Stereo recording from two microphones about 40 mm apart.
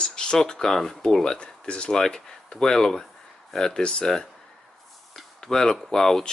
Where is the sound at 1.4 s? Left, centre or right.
Left.